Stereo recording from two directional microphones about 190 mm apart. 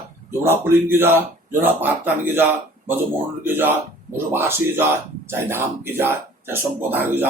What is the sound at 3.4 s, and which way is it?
Speech, 10° right (ahead or behind).